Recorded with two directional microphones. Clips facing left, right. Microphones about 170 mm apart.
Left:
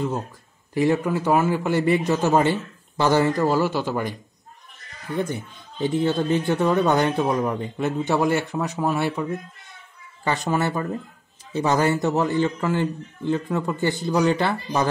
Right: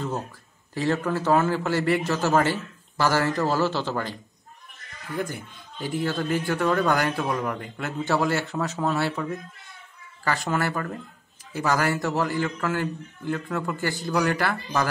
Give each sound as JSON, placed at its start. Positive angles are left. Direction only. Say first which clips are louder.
{"t": 0.7, "sound": "a man's voice", "louder": "left 4 dB", "side_deg": 15}